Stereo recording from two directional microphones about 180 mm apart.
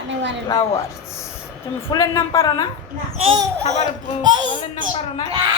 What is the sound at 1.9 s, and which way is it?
Speech, 20° left (ahead or behind).